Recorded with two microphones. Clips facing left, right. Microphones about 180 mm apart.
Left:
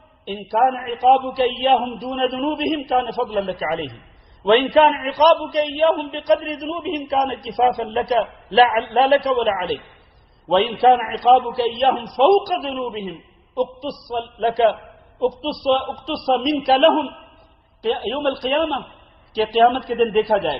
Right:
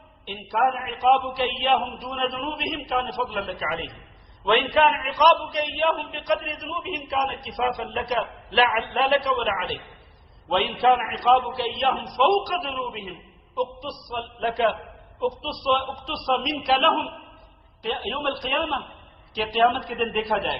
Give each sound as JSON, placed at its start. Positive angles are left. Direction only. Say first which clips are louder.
{"t": 0.3, "sound": "a man's voice", "louder": "left 5 dB", "side_deg": 35}